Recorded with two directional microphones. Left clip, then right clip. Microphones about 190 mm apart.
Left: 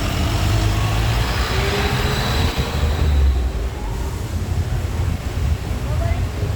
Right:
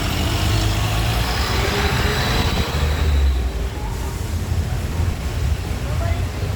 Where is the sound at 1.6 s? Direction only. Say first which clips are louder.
Even; 55° right (ahead or behind).